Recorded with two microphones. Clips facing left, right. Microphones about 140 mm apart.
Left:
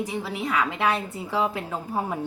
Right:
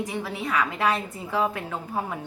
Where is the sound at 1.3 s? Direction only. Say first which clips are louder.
Even; 20° left (ahead or behind).